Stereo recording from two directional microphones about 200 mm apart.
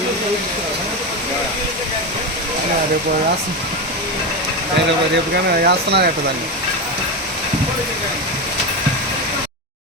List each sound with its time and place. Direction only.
5.6 s speech: 55° right (ahead or behind)